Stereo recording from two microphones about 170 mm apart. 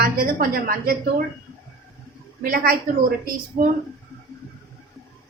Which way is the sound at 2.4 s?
60° right (ahead or behind).